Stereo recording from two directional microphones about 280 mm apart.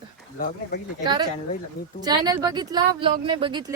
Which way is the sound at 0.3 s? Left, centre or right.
Left.